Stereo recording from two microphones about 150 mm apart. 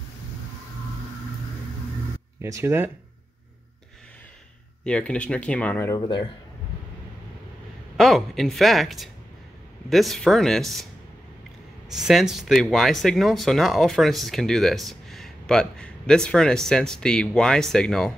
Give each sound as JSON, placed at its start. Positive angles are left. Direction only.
{"t": 2.4, "sound": "speech", "side_deg": -20}
{"t": 4.8, "sound": "speech", "side_deg": 5}
{"t": 5.9, "sound": "speech", "side_deg": 30}
{"t": 8.0, "sound": "speech", "side_deg": 0}
{"t": 11.9, "sound": "speech", "side_deg": 0}